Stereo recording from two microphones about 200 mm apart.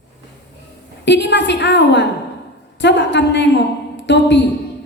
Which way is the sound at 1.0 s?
60° left (ahead or behind).